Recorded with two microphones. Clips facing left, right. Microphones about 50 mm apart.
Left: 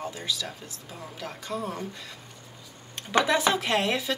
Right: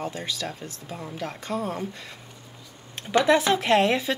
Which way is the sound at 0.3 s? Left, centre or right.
Right.